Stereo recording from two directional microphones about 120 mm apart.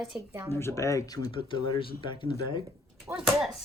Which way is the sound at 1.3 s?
45° left (ahead or behind).